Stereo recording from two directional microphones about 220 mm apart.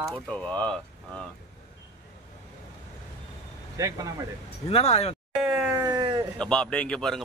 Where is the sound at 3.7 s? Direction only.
15° right (ahead or behind).